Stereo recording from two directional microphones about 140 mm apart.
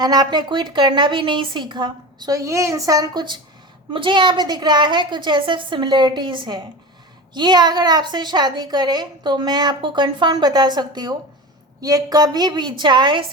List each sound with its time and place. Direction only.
0.0 s a woman's voice: 30° right (ahead or behind)